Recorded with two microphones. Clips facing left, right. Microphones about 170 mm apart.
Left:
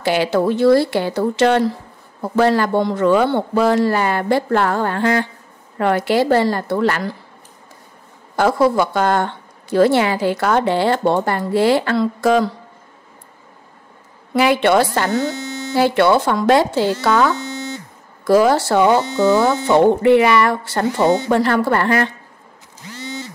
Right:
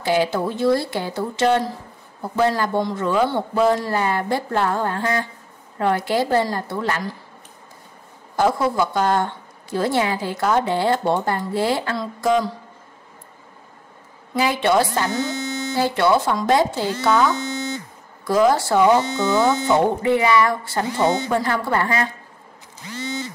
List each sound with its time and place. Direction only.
0.0 s a woman's voice: 75° left (ahead or behind)
8.4 s a woman's voice: 75° left (ahead or behind)
14.3 s a woman's voice: 75° left (ahead or behind)
15.3 s mains hum: 15° right (ahead or behind)
15.7 s a woman's voice: 70° left (ahead or behind)
17.4 s buzzer: 15° right (ahead or behind)
18.2 s a woman's voice: 75° left (ahead or behind)